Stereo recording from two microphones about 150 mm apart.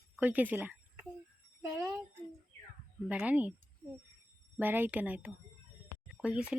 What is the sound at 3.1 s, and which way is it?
Speech, 10° right (ahead or behind).